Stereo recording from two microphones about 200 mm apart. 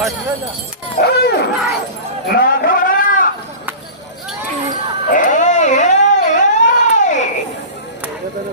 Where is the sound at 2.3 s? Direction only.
50° left (ahead or behind).